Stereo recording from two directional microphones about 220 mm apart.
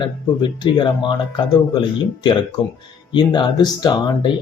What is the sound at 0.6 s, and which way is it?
Speech, 20° left (ahead or behind).